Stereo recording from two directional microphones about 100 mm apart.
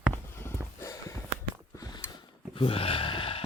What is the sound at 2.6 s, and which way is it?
Gasp, 70° left (ahead or behind).